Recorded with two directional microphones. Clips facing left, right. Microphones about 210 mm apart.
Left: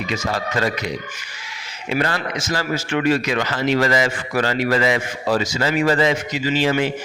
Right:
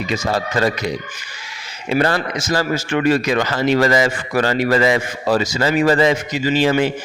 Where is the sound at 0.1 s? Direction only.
35° right (ahead or behind).